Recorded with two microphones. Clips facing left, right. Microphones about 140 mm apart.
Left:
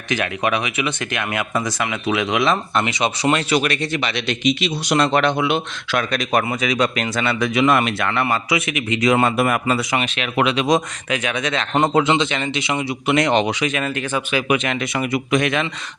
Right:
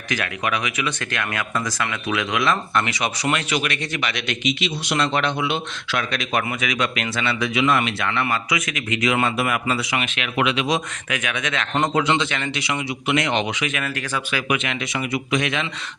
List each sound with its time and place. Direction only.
0.1 s speech: 25° left (ahead or behind)
13.1 s speech: 35° left (ahead or behind); by 14.5 s 20° left (ahead or behind)
14.5 s speech: 40° left (ahead or behind)